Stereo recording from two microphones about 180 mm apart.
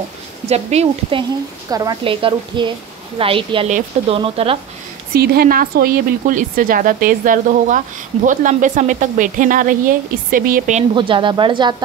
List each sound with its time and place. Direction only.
0.5 s speech: 35° right (ahead or behind)
1.7 s a woman's voice: 20° right (ahead or behind)
5.1 s a woman's voice: 60° right (ahead or behind)
11.0 s a woman's voice: 25° right (ahead or behind)